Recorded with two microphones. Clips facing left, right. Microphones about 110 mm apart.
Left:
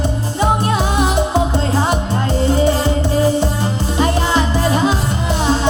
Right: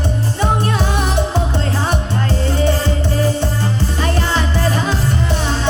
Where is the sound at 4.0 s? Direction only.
15° left (ahead or behind).